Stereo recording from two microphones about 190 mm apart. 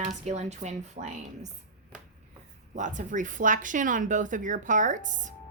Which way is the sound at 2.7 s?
40° right (ahead or behind).